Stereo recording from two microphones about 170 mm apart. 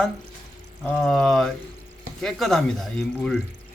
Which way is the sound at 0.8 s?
Centre (ahead or behind).